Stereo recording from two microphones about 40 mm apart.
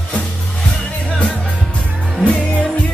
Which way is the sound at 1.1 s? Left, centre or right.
Left.